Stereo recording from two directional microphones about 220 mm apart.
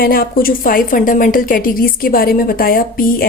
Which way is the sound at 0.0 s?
40° left (ahead or behind).